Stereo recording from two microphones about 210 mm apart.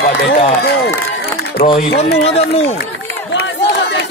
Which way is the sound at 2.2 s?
30° left (ahead or behind).